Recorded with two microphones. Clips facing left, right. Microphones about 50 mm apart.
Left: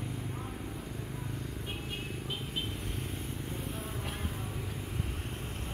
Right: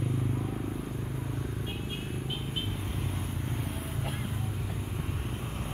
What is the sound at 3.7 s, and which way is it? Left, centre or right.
Music, centre.